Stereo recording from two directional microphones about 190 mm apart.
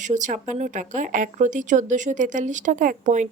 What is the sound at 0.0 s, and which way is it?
Speech, 40° right (ahead or behind).